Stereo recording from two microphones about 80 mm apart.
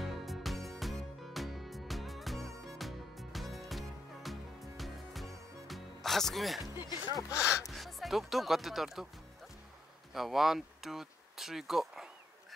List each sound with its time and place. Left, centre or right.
0.0 s music: centre
6.9 s speech: left
7.6 s speech: centre
10.1 s speech: centre